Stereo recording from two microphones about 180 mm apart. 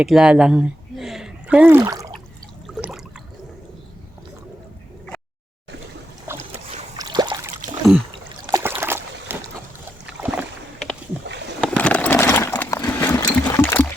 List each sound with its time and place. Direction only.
0.0 s speech: 5° right (ahead or behind)
2.6 s water: centre (ahead or behind)
6.3 s boat: 10° right (ahead or behind)
6.9 s a sound: 20° right (ahead or behind)
8.4 s boat: 15° right (ahead or behind)
10.2 s rowboat: 10° right (ahead or behind)
11.6 s a sound: 5° left (ahead or behind)